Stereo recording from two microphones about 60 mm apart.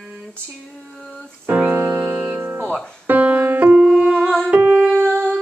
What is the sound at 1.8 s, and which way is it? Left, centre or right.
Music, right.